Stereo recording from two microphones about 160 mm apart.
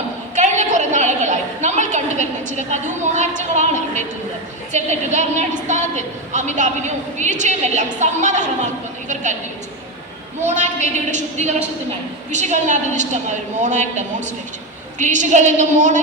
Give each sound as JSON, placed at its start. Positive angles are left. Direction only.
{"t": 0.3, "sound": "a sound", "side_deg": -45}
{"t": 4.7, "sound": "a woman's voice", "side_deg": -45}
{"t": 10.4, "sound": "a woman's voice", "side_deg": -50}